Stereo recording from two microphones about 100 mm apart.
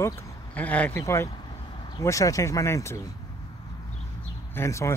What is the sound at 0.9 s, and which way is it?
Speech, 30° left (ahead or behind).